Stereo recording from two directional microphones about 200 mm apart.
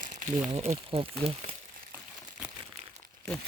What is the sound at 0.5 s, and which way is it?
Speech, 30° right (ahead or behind).